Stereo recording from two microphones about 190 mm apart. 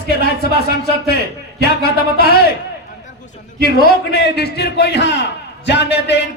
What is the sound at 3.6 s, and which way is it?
A man's voice, 55° left (ahead or behind).